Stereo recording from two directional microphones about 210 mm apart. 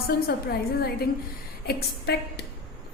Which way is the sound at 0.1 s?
50° left (ahead or behind).